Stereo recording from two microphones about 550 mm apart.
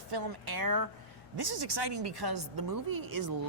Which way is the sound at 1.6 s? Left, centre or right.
Right.